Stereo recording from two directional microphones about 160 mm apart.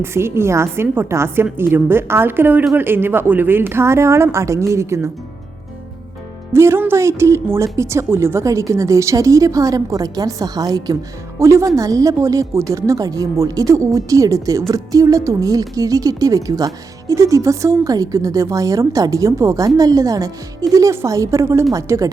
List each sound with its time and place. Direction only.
0.0 s a woman's voice: 15° right (ahead or behind)
6.5 s a woman's voice: 15° right (ahead or behind)